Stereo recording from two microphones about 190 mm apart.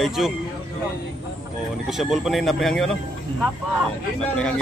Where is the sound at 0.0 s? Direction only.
Centre (ahead or behind).